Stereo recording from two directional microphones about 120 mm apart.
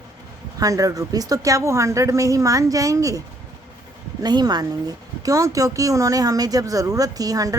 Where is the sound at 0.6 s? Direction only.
30° right (ahead or behind).